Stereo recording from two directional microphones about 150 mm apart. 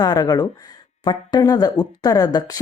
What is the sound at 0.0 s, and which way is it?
Speech, 25° left (ahead or behind).